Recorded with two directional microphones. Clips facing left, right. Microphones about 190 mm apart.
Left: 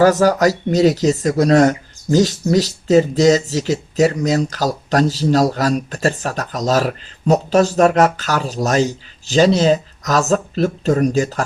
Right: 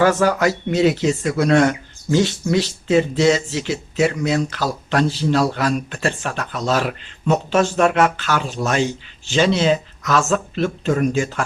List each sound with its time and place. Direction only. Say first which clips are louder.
0.0 s speech: left 4 dB; 40° left (ahead or behind)